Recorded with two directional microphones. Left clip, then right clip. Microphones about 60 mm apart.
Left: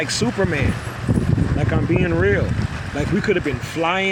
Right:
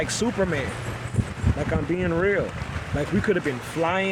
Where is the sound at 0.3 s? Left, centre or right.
Left.